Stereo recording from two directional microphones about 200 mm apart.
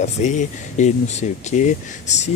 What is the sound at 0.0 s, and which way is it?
Speech, 35° left (ahead or behind).